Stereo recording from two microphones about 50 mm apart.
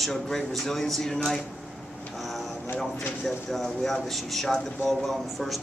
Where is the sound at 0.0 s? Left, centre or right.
Centre.